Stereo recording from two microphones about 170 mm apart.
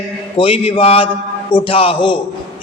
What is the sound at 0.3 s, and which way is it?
A man's voice, 30° left (ahead or behind).